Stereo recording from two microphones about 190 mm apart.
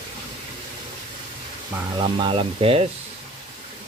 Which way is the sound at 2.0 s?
25° right (ahead or behind).